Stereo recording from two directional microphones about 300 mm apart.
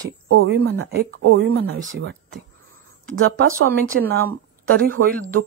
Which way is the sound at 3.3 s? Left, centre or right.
Right.